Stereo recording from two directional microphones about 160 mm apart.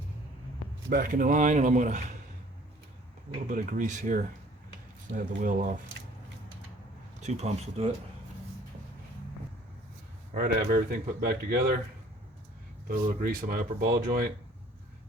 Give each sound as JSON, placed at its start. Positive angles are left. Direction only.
{"t": 0.9, "sound": "a man's voice", "side_deg": -65}
{"t": 3.5, "sound": "speech", "side_deg": -55}
{"t": 7.2, "sound": "a man's voice", "side_deg": -45}
{"t": 10.3, "sound": "speech", "side_deg": -70}
{"t": 12.9, "sound": "speech", "side_deg": -65}